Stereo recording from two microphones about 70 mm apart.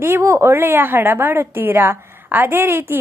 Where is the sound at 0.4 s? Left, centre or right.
Right.